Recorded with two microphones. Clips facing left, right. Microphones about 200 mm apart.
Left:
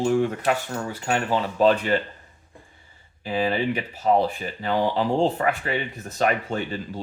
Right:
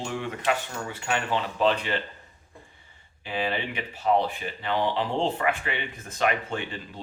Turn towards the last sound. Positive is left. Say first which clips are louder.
# left 5 dB
turn(degrees=40)  # may be behind; listen again after turning